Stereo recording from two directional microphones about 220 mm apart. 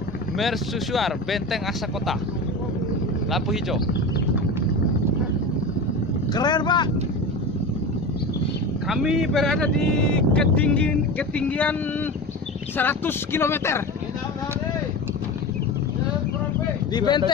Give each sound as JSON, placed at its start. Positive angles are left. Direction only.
{"t": 0.4, "sound": "speech", "side_deg": 0}
{"t": 3.3, "sound": "speech", "side_deg": 0}
{"t": 6.3, "sound": "speech", "side_deg": 20}
{"t": 8.8, "sound": "speech", "side_deg": 0}
{"t": 12.7, "sound": "speech", "side_deg": 10}
{"t": 16.9, "sound": "speech", "side_deg": 20}